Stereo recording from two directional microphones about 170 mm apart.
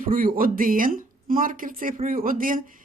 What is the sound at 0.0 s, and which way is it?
Speech, 55° right (ahead or behind).